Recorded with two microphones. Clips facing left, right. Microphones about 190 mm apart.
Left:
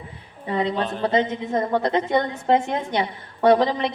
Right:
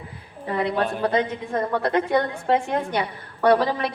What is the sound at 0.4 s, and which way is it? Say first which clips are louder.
A woman's voice: even; 20° left (ahead or behind).